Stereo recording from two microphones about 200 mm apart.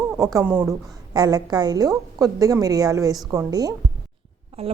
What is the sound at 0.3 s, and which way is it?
Speech, 10° right (ahead or behind).